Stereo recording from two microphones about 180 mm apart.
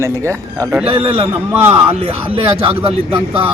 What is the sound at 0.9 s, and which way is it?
Speech, 30° right (ahead or behind).